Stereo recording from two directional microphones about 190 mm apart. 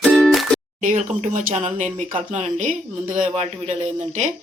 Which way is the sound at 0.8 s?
40° right (ahead or behind).